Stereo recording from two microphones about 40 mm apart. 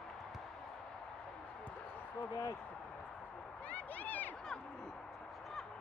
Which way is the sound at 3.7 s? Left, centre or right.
Left.